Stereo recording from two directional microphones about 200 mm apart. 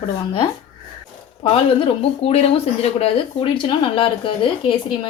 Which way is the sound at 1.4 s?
30° left (ahead or behind).